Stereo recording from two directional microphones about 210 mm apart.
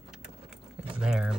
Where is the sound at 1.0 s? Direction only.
5° right (ahead or behind).